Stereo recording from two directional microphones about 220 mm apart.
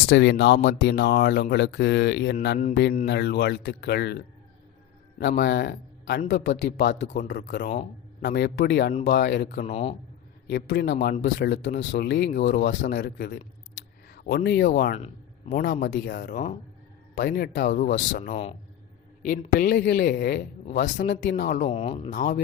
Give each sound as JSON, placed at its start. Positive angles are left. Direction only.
{"t": 0.0, "sound": "speech", "side_deg": 50}
{"t": 5.4, "sound": "speech", "side_deg": 50}
{"t": 9.6, "sound": "a man's voice", "side_deg": 25}
{"t": 10.4, "sound": "speech", "side_deg": 50}
{"t": 12.8, "sound": "speech", "side_deg": 35}
{"t": 14.9, "sound": "a sound", "side_deg": 30}
{"t": 15.5, "sound": "speech", "side_deg": 40}
{"t": 21.4, "sound": "speech", "side_deg": 35}